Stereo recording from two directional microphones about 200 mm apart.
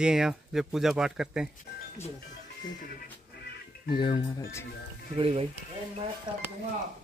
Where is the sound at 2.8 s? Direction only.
45° left (ahead or behind).